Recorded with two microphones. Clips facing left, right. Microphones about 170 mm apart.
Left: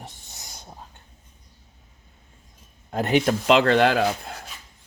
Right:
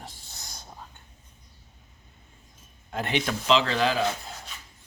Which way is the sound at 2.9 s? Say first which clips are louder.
Left 7 dB; 45° left (ahead or behind).